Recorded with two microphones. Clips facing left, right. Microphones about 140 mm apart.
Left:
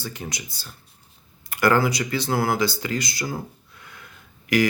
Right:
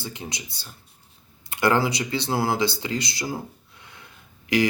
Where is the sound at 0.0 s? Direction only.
20° right (ahead or behind).